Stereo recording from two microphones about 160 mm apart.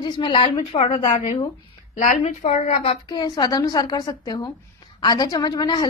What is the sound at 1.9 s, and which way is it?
A woman's voice, 50° left (ahead or behind).